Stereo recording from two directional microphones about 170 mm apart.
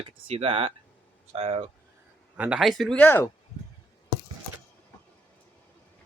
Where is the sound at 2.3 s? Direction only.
5° right (ahead or behind); by 3.3 s 10° left (ahead or behind).